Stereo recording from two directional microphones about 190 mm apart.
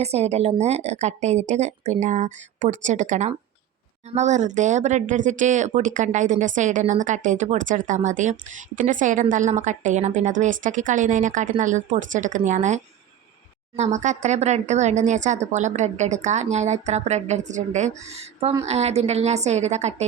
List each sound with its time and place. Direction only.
0.0 s speech: 35° right (ahead or behind)